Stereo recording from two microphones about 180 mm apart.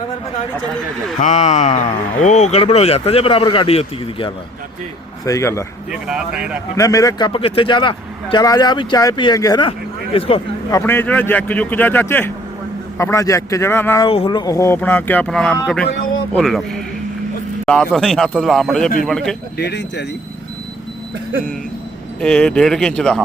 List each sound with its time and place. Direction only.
1.2 s speech: 40° left (ahead or behind)
5.2 s speech: 15° left (ahead or behind)
5.9 s speech: 5° right (ahead or behind)
6.7 s a man's voice: 20° left (ahead or behind)
10.7 s speech: 15° left (ahead or behind)
14.0 s speech: 30° left (ahead or behind); by 19.4 s 5° left (ahead or behind)
19.5 s speech: 70° left (ahead or behind)
22.2 s speech: 5° left (ahead or behind)